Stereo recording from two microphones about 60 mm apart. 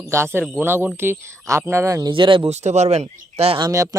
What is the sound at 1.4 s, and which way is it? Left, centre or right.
Speech, right.